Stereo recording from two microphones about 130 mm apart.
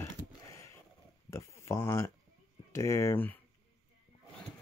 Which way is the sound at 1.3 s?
20° left (ahead or behind).